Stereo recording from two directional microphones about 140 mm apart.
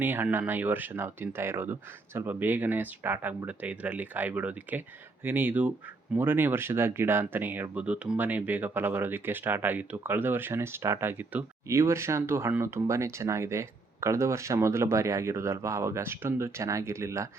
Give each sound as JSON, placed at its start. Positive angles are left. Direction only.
{"t": 0.0, "sound": "speech", "side_deg": -15}